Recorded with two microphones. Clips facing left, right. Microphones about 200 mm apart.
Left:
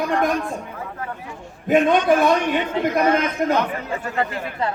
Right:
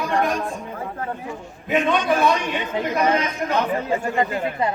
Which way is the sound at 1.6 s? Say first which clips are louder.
Left 4 dB; 45° left (ahead or behind).